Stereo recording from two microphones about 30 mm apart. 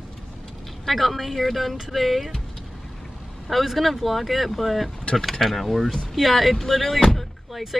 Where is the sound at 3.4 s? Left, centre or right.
Centre.